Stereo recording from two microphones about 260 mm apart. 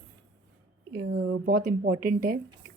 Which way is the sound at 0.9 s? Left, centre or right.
Right.